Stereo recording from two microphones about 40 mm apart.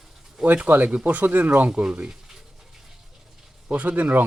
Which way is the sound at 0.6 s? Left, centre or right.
Right.